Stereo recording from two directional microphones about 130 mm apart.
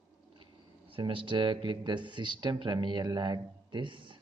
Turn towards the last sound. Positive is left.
turn(degrees=-40)  # may be behind; listen again after turning